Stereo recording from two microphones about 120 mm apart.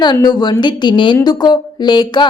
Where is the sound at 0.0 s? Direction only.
35° left (ahead or behind).